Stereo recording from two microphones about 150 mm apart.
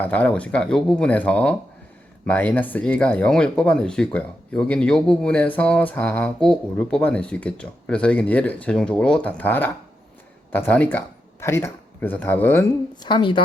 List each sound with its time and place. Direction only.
0.0 s speech: 10° left (ahead or behind)
13.0 s a woman's voice: 30° left (ahead or behind)